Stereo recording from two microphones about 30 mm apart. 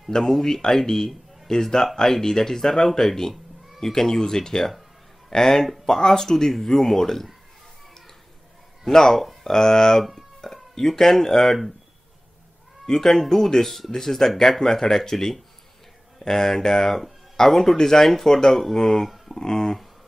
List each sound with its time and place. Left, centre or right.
0.2 s speech: centre
0.7 s speech: centre
8.9 s speech: centre
12.8 s speech: centre